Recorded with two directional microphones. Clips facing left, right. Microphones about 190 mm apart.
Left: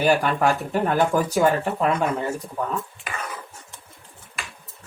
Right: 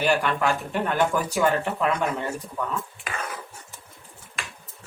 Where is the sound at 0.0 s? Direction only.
40° left (ahead or behind).